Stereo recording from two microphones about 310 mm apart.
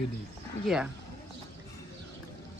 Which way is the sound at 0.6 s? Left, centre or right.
Centre.